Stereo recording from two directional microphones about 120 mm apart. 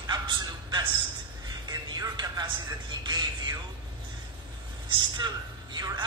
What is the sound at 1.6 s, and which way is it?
Music, 35° right (ahead or behind).